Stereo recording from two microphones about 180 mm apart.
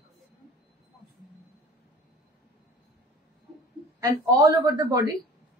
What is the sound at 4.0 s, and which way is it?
Speech, 20° right (ahead or behind).